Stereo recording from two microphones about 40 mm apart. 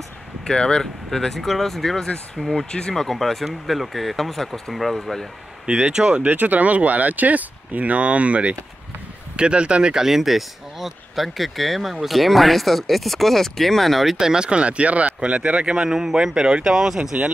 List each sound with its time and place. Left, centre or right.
0.5 s speech: centre
1.1 s speech: centre
5.7 s speech: right
6.2 s speech: right
9.9 s speech: centre
14.1 s speech: centre
16.0 s speech: centre